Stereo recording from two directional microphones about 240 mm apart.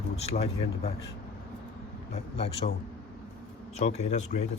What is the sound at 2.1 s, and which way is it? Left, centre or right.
Speech, left.